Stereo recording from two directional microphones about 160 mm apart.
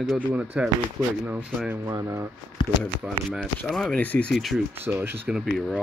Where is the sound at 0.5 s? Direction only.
5° right (ahead or behind).